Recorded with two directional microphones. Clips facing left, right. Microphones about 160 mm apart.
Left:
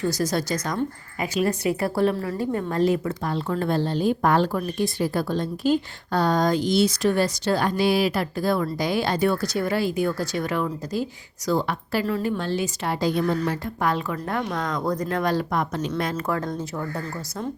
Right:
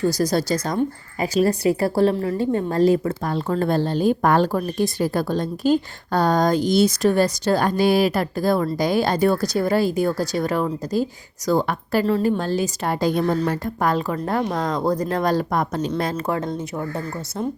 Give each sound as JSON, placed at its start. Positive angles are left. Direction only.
{"t": 0.1, "sound": "speech", "side_deg": -35}
{"t": 12.0, "sound": "speech", "side_deg": -35}